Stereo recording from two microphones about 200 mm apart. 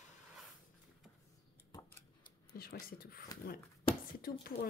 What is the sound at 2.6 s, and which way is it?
Speech, 50° left (ahead or behind).